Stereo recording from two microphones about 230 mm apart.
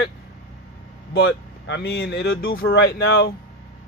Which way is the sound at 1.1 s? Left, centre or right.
Left.